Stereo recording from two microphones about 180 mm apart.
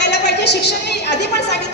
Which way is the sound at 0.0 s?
70° left (ahead or behind).